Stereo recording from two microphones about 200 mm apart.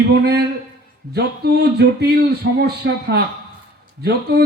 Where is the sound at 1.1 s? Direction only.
55° right (ahead or behind).